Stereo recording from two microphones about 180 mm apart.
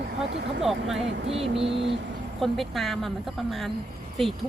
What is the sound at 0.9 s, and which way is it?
Vehicle, 35° right (ahead or behind).